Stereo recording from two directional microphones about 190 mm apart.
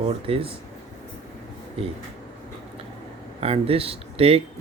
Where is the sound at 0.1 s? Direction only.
30° right (ahead or behind).